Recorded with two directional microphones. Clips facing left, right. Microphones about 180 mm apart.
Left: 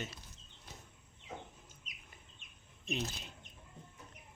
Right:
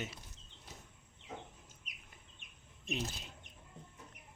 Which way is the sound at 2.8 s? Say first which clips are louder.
Left 1 dB; 5° right (ahead or behind).